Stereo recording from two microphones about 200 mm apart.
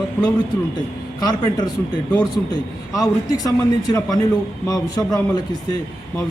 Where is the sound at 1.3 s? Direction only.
20° left (ahead or behind).